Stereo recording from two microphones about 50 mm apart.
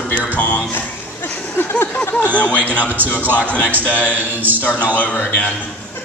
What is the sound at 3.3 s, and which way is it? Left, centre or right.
A man's voice, left.